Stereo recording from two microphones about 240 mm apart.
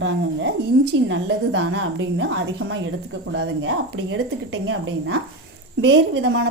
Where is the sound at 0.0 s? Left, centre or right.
Right.